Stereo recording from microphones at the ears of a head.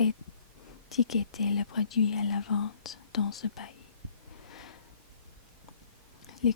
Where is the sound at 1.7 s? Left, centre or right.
Left.